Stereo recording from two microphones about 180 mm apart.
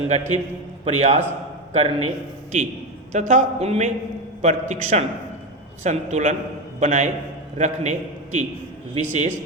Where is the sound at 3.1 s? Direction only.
40° right (ahead or behind).